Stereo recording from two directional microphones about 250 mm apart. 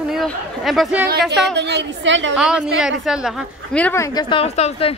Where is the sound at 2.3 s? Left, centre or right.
Centre; by 4.9 s left.